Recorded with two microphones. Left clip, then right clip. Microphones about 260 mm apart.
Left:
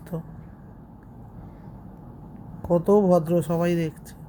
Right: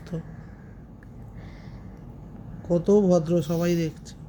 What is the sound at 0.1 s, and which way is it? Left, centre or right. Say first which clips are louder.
Speech: left 2 dB; centre.